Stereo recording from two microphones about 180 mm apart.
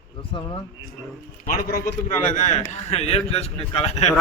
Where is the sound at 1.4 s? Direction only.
50° left (ahead or behind); by 4.1 s 35° left (ahead or behind).